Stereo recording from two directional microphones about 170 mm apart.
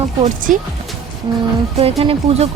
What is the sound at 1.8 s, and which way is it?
Speech, 35° right (ahead or behind).